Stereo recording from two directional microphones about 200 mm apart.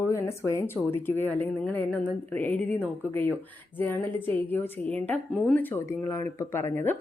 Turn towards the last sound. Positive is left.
turn(degrees=10)  # may be behind; listen again after turning